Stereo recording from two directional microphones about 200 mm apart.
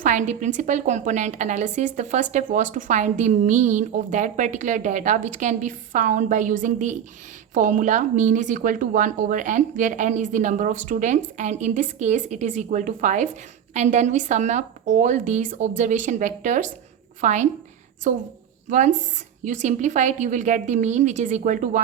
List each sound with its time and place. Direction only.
0.0 s speech: 35° right (ahead or behind)